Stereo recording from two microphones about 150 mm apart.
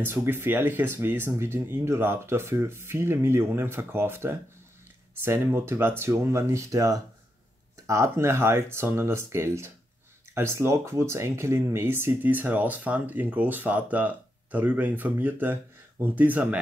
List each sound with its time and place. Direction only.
0.0 s speech: 15° right (ahead or behind)